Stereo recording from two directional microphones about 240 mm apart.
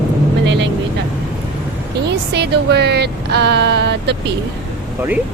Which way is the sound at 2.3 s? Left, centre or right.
Right.